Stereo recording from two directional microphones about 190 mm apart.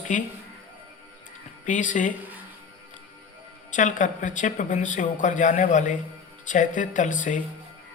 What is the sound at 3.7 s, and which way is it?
Speech, 40° left (ahead or behind).